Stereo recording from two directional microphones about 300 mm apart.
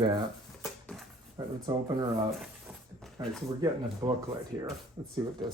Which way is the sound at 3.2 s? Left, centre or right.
Centre.